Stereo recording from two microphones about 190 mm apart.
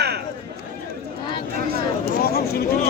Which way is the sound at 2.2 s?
50° left (ahead or behind).